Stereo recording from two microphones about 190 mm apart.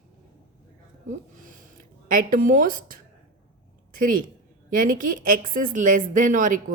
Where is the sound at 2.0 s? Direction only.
45° right (ahead or behind).